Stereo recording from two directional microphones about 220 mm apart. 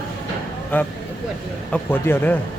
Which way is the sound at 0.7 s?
10° left (ahead or behind).